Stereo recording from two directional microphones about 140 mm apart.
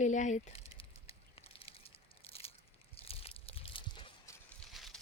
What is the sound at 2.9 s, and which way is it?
Crunch, 45° left (ahead or behind).